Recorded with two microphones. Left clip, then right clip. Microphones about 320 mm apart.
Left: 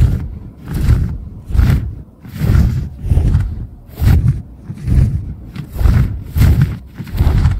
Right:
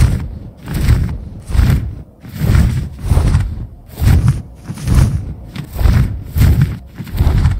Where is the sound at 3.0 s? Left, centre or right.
Right.